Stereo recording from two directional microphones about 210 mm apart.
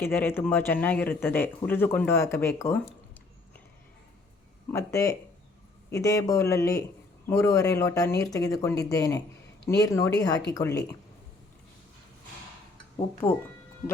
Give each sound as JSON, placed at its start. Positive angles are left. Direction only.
{"t": 0.0, "sound": "speech", "side_deg": 10}
{"t": 4.7, "sound": "speech", "side_deg": 15}